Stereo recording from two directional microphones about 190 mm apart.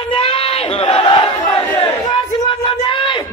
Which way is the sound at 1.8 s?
25° left (ahead or behind).